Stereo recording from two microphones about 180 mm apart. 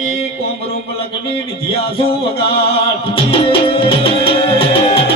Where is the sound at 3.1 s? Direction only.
30° left (ahead or behind).